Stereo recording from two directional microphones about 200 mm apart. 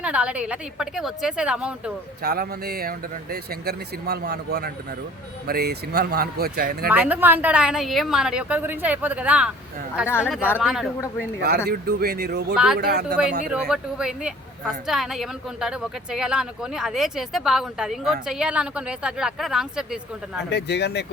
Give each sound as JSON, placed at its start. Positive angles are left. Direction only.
{"t": 0.0, "sound": "speech", "side_deg": -5}
{"t": 2.2, "sound": "speech", "side_deg": -50}
{"t": 6.9, "sound": "a woman's voice", "side_deg": -5}
{"t": 11.3, "sound": "speech", "side_deg": -50}
{"t": 12.5, "sound": "speech", "side_deg": 0}
{"t": 12.8, "sound": "speech", "side_deg": -55}
{"t": 13.5, "sound": "speech", "side_deg": -5}
{"t": 20.5, "sound": "speech", "side_deg": 55}